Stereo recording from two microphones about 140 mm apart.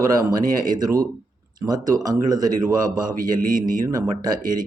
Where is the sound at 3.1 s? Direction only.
80° right.